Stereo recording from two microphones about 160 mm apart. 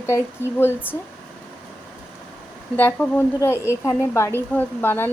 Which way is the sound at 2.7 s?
10° left (ahead or behind).